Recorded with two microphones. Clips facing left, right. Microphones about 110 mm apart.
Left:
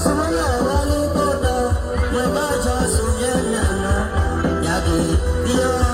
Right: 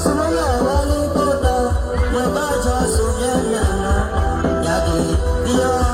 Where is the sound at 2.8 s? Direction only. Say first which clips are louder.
Right 2 dB; 30° right (ahead or behind).